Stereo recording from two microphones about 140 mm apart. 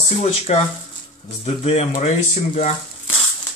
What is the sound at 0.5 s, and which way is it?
Speech, 55° left (ahead or behind).